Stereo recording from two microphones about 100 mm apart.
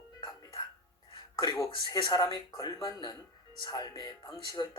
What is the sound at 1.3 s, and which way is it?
Speech, 35° left (ahead or behind).